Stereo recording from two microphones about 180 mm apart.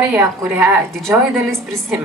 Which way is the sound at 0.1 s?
10° right (ahead or behind).